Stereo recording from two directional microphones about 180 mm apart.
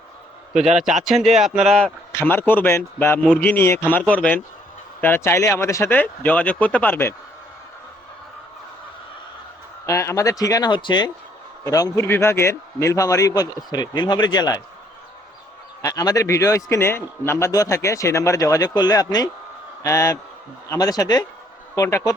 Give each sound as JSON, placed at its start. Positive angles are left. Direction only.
{"t": 0.8, "sound": "a man's voice", "side_deg": 0}
{"t": 9.8, "sound": "a man's voice", "side_deg": 15}
{"t": 15.8, "sound": "a man's voice", "side_deg": 20}